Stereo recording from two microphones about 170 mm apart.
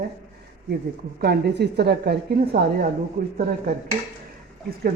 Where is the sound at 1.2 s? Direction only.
75° right (ahead or behind).